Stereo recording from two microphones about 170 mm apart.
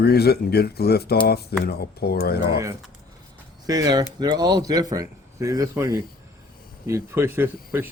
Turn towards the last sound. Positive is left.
turn(degrees=-10)  # may be behind; listen again after turning